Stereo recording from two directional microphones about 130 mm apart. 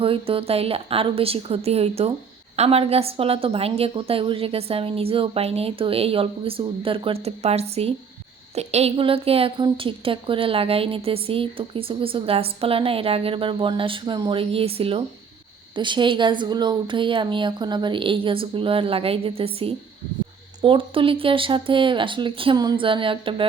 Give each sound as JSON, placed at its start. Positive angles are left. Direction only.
{"t": 0.0, "sound": "a woman's voice", "side_deg": -45}